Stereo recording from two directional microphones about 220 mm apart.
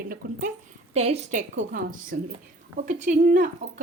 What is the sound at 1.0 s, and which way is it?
A woman's voice, 30° right (ahead or behind).